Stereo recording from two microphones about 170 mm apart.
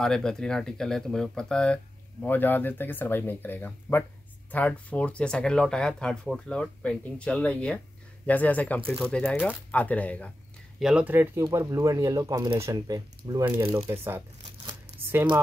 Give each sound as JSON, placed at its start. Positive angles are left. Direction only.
{"t": 0.0, "sound": "speech", "side_deg": 5}
{"t": 10.8, "sound": "speech", "side_deg": -5}